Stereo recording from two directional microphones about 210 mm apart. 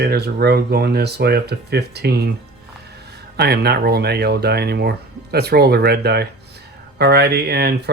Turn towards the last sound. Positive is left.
turn(degrees=-50)  # may be behind; listen again after turning